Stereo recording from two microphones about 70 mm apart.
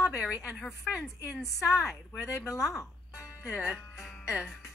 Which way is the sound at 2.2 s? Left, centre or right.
Left.